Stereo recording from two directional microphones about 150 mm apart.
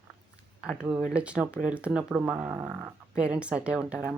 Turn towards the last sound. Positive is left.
turn(degrees=-5)  # may be behind; listen again after turning